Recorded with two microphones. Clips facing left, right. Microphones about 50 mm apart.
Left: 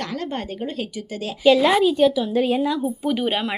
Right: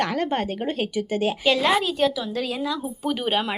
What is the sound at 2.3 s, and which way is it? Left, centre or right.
Speech, left.